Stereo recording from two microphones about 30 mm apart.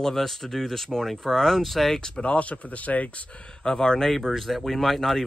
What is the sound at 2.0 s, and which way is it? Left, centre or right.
Speech, left.